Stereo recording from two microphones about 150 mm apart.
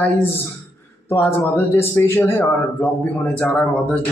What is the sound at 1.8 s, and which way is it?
A man's voice, 15° left (ahead or behind).